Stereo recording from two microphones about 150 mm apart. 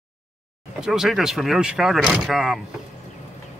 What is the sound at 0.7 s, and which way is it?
Speech, 5° right (ahead or behind).